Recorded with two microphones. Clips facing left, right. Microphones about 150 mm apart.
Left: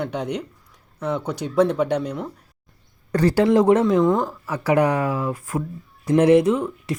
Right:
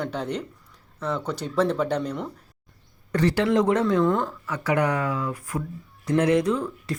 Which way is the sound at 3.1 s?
35° left (ahead or behind).